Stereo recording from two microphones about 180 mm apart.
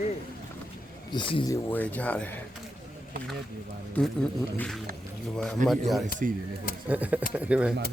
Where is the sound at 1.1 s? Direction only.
25° left (ahead or behind).